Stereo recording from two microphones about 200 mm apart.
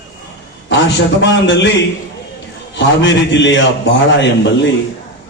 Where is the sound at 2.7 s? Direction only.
65° left (ahead or behind).